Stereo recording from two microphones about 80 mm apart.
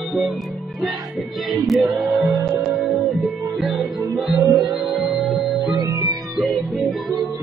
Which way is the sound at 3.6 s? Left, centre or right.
Centre.